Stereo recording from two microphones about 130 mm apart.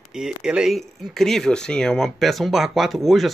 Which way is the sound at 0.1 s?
5° right (ahead or behind).